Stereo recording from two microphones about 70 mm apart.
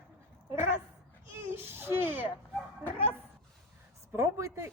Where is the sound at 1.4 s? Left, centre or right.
Right.